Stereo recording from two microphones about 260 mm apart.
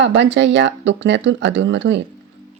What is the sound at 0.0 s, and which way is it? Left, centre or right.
Speech, right.